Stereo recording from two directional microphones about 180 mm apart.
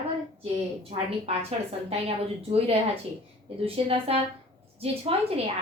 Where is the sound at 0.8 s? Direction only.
35° right (ahead or behind).